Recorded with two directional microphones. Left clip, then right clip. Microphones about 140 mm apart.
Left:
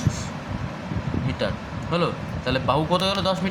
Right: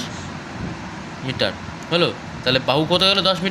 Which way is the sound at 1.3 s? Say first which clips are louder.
Right 7 dB; 20° right (ahead or behind).